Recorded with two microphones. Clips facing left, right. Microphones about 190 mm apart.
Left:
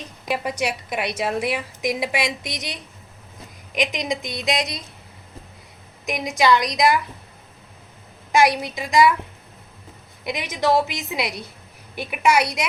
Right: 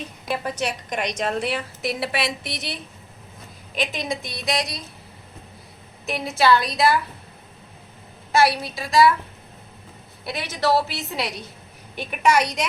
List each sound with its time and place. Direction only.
0.3 s a woman's voice: 10° left (ahead or behind)
3.8 s a woman's voice: 15° left (ahead or behind)
6.1 s a woman's voice: 15° left (ahead or behind)
8.3 s a woman's voice: 15° left (ahead or behind)
10.2 s a woman's voice: 15° left (ahead or behind)